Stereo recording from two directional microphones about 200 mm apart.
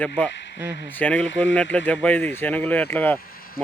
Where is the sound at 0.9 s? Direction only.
10° left (ahead or behind).